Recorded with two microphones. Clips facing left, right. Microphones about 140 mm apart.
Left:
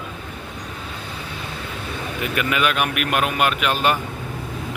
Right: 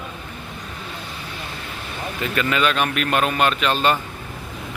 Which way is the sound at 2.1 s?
15° left (ahead or behind).